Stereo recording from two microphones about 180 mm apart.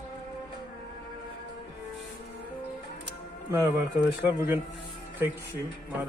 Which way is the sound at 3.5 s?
20° right (ahead or behind).